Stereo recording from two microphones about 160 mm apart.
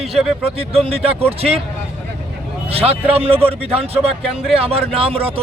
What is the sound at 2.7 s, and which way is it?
A man's voice, 40° right (ahead or behind).